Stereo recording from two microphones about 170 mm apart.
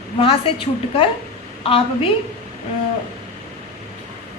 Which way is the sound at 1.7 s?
35° left (ahead or behind).